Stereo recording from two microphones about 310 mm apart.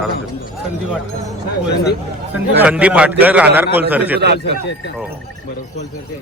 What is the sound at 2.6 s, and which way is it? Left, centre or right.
A man's voice, centre.